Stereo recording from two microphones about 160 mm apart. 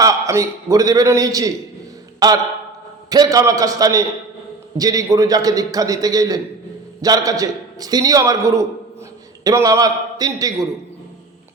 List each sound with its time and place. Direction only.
0.0 s a man's voice: 20° right (ahead or behind)